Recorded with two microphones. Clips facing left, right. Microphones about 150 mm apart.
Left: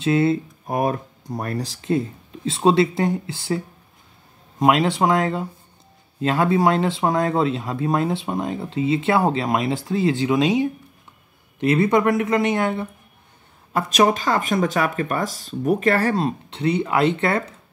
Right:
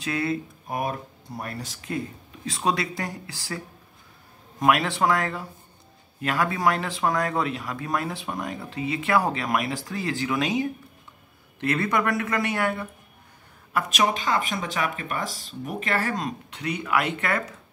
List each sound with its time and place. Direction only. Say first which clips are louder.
0.0 s speech: left 8 dB; 25° left (ahead or behind)
0.7 s speech: left 7 dB; 45° left (ahead or behind); by 12.8 s 20° left (ahead or behind)
13.7 s speech: left 6 dB; 40° left (ahead or behind)